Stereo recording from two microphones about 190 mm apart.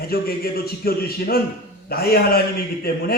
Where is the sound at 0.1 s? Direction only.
55° left (ahead or behind).